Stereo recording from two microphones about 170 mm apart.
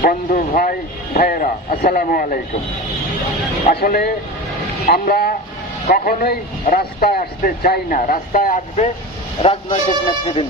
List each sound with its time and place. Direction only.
0.0 s a man's voice: 50° left (ahead or behind)
3.7 s a man's voice: 55° left (ahead or behind); by 10.4 s 35° left (ahead or behind)